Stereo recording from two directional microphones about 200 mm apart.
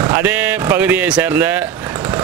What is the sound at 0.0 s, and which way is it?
Speech, 10° right (ahead or behind).